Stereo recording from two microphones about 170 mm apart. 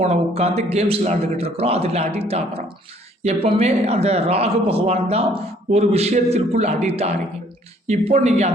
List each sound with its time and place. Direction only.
0.0 s a man's voice: 35° right (ahead or behind)